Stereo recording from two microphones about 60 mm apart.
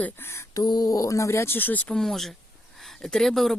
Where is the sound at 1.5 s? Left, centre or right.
Left.